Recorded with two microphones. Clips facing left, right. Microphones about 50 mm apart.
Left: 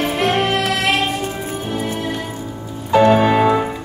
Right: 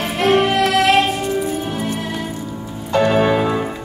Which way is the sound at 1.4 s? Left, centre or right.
Left.